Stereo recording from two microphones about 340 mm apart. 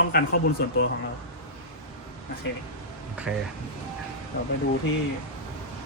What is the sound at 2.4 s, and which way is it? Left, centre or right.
Speech, left.